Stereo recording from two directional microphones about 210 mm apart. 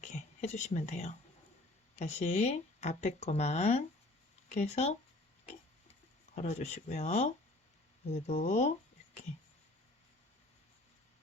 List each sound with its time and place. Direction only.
0.0 s speech: 35° left (ahead or behind)
6.3 s speech: 35° left (ahead or behind)